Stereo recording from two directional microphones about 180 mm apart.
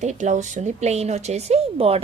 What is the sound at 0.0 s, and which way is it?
Speech, 40° right (ahead or behind).